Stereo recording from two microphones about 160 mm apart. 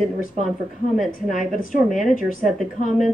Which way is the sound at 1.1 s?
55° left (ahead or behind).